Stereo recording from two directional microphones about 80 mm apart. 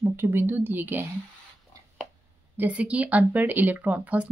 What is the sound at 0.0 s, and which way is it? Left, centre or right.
Speech, right.